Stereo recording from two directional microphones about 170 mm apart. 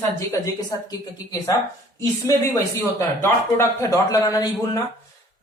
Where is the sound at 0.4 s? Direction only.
20° left (ahead or behind).